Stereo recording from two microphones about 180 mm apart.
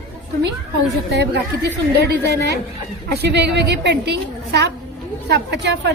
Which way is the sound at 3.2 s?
70° right (ahead or behind).